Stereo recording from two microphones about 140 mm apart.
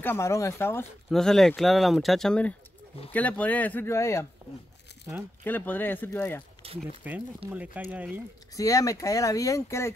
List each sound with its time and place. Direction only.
0.0 s speech: 15° left (ahead or behind)
1.1 s speech: 5° left (ahead or behind); by 4.3 s 20° left (ahead or behind)
5.4 s speech: 15° left (ahead or behind)
6.6 s speech: 45° right (ahead or behind)
7.4 s speech: 10° right (ahead or behind)
8.5 s speech: 25° left (ahead or behind)